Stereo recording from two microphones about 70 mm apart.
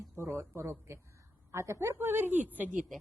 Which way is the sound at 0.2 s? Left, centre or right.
Right.